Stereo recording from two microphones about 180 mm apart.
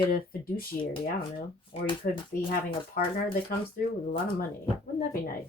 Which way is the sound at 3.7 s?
55° left (ahead or behind).